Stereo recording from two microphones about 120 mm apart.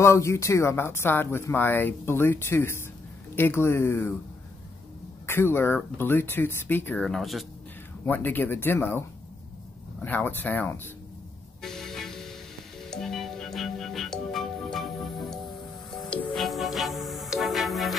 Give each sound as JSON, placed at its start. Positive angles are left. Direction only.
{"t": 0.0, "sound": "speech", "side_deg": 25}
{"t": 5.2, "sound": "speech", "side_deg": 20}
{"t": 7.0, "sound": "speech", "side_deg": 0}
{"t": 8.0, "sound": "speech", "side_deg": 15}
{"t": 11.6, "sound": "music", "side_deg": 5}